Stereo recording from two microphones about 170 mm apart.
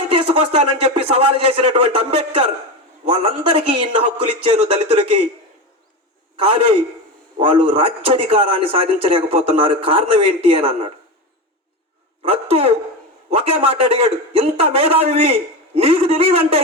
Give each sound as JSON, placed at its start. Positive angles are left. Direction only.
{"t": 0.1, "sound": "a man's voice", "side_deg": -30}
{"t": 7.3, "sound": "a man's voice", "side_deg": -30}
{"t": 12.3, "sound": "a man's voice", "side_deg": -35}